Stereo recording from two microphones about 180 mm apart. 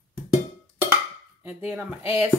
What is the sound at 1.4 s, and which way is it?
Speech, 10° right (ahead or behind).